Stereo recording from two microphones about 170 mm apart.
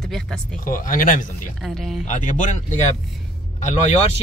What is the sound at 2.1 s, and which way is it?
Speech, 45° left (ahead or behind).